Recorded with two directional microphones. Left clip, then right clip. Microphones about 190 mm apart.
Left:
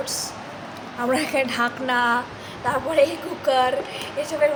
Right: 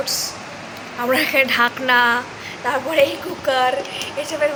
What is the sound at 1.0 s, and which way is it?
A woman's voice, 10° left (ahead or behind).